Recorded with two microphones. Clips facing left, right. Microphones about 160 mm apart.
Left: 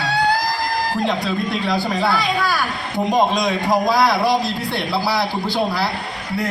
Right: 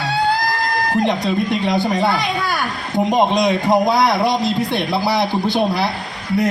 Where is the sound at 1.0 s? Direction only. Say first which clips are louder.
Right 3 dB; 20° right (ahead or behind).